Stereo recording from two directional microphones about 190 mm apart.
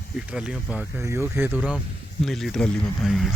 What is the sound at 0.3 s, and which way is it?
Speech, 5° right (ahead or behind).